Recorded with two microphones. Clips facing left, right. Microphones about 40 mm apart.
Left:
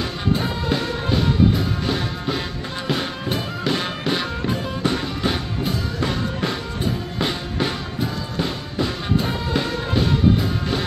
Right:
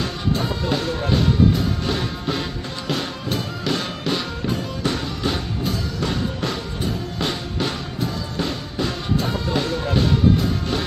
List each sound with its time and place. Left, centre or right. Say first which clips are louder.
0.0 s music: left 1 dB; centre
2.9 s music: left 1 dB; centre
5.6 s music: left 1 dB; left; by 10.1 s centre